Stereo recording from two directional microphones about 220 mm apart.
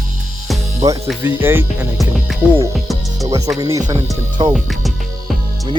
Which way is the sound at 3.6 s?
15° right (ahead or behind).